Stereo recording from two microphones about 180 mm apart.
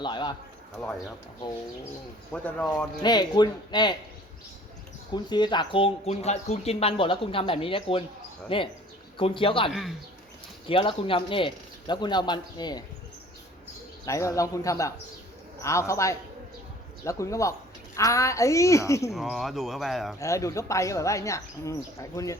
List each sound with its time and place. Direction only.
0.0 s speech: 25° left (ahead or behind)
2.3 s speech: 10° left (ahead or behind)
3.0 s speech: 25° left (ahead or behind)
5.1 s speech: 25° left (ahead or behind)
14.0 s speech: 15° left (ahead or behind)
19.1 s speech: centre (ahead or behind)
20.1 s speech: 15° left (ahead or behind)